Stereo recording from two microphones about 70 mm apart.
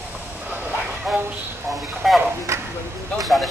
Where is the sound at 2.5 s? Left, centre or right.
Right.